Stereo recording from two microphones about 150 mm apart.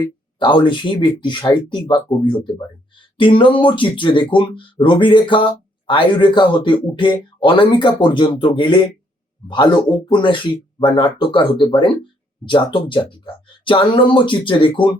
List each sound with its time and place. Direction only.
0.0 s speech: 35° left (ahead or behind)